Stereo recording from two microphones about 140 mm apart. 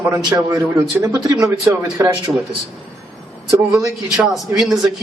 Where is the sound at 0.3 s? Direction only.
25° right (ahead or behind).